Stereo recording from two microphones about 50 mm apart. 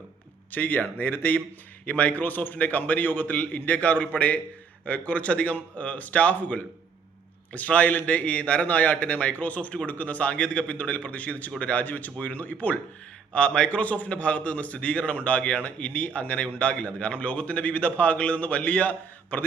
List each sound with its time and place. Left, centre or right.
0.5 s a man's voice: left